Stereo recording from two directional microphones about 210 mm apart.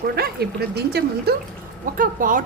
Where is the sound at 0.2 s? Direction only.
50° right (ahead or behind).